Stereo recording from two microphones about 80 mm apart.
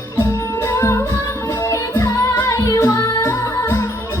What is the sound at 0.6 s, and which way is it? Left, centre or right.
Music, left.